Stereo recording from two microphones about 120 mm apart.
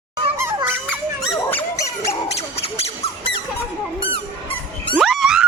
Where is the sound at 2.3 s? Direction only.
60° left (ahead or behind).